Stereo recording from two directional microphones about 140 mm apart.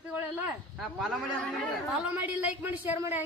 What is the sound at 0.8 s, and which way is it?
Speech, centre (ahead or behind).